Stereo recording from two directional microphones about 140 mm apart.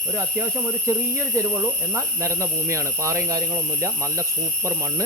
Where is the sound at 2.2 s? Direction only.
20° right (ahead or behind).